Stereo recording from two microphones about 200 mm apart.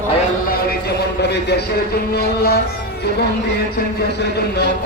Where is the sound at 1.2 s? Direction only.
55° left (ahead or behind).